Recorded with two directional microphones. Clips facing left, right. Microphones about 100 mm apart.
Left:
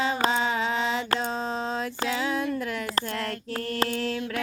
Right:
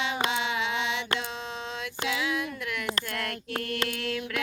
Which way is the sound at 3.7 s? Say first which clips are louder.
Left 7 dB; 35° left (ahead or behind).